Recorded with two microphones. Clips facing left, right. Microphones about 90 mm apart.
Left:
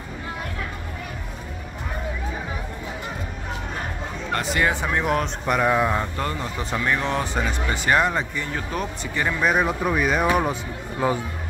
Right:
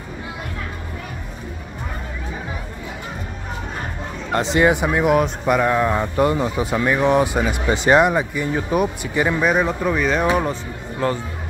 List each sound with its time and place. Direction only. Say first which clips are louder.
4.3 s speech: right 6 dB; 20° right (ahead or behind)
5.0 s speech: right 6 dB; 5° right (ahead or behind)
6.1 s speech: right 9 dB; 15° right (ahead or behind)
9.4 s speech: right 3 dB; centre (ahead or behind)